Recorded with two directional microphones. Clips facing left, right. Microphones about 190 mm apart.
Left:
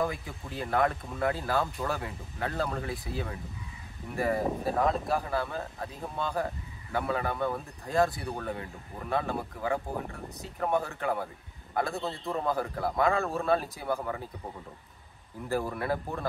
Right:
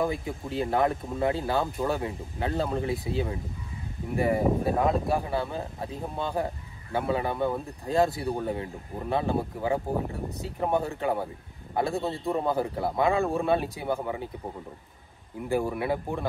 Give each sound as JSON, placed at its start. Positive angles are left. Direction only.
{"t": 0.0, "sound": "speech", "side_deg": -25}
{"t": 15.4, "sound": "speech", "side_deg": -15}